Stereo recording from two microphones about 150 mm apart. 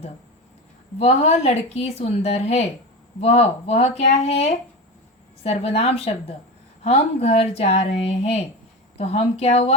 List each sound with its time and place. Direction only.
0.9 s speech: 45° left (ahead or behind)